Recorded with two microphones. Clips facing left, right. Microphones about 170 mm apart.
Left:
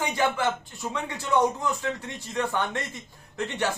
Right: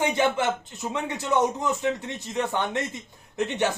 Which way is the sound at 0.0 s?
20° right (ahead or behind).